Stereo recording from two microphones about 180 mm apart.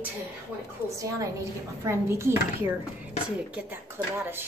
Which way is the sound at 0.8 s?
20° right (ahead or behind).